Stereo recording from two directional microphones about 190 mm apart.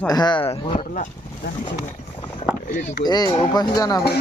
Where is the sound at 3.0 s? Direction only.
20° left (ahead or behind).